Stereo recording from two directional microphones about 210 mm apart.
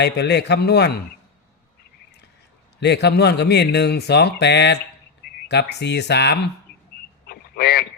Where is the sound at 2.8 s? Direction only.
55° left (ahead or behind).